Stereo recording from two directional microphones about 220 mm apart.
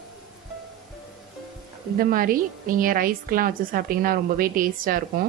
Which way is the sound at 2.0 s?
40° right (ahead or behind).